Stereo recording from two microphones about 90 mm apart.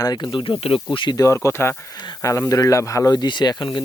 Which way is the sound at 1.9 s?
55° left (ahead or behind).